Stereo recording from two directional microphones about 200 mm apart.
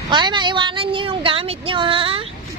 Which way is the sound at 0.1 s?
20° right (ahead or behind).